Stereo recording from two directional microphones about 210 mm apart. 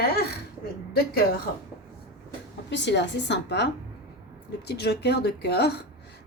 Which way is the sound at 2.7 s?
55° left (ahead or behind).